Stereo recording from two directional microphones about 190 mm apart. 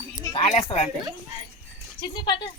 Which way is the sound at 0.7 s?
25° left (ahead or behind).